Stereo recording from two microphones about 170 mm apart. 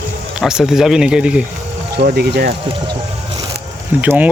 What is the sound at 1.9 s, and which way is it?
Speech, 65° right (ahead or behind).